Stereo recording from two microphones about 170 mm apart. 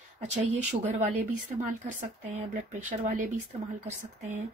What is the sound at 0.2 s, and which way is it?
Speech, 45° right (ahead or behind).